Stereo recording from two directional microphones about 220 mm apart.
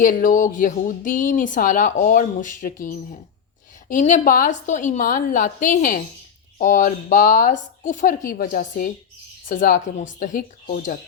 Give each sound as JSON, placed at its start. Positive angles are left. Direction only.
{"t": 0.0, "sound": "a woman's voice", "side_deg": 35}